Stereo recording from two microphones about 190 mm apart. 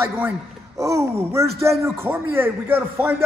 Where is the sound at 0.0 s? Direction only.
10° right (ahead or behind).